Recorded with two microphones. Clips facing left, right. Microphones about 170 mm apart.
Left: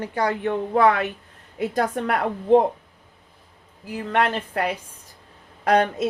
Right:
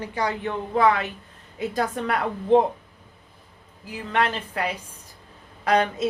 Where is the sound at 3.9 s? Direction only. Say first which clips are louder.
Left 2 dB; 50° left (ahead or behind).